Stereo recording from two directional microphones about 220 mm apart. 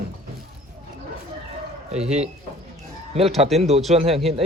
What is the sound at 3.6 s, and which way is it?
Speech, 30° right (ahead or behind).